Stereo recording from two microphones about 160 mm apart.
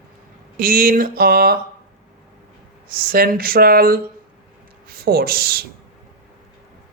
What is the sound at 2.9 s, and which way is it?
Speech, 65° right (ahead or behind).